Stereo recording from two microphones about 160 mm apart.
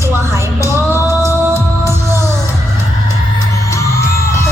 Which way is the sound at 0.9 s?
15° right (ahead or behind).